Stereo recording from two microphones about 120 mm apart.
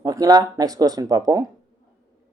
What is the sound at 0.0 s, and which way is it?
Speech, 30° right (ahead or behind).